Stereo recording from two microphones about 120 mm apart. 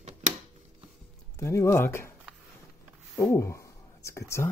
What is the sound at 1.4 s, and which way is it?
Speech, 25° left (ahead or behind).